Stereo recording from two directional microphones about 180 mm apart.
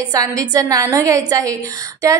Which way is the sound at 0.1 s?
20° right (ahead or behind).